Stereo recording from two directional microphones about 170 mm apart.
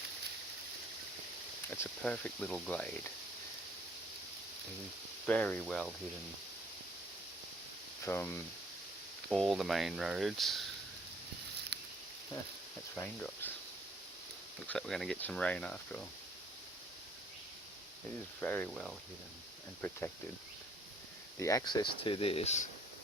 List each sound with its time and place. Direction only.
1.6 s speech: 15° left (ahead or behind)
5.2 s speech: 5° left (ahead or behind)
8.0 s speech: 15° left (ahead or behind)
9.3 s speech: centre (ahead or behind)
13.0 s speech: 10° left (ahead or behind)
14.7 s speech: centre (ahead or behind)
18.3 s speech: 10° left (ahead or behind)
21.3 s speech: 20° left (ahead or behind); by 22.6 s 40° left (ahead or behind)